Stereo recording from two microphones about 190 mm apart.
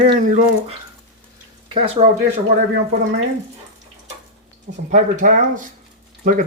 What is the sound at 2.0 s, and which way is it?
Speech, 30° right (ahead or behind).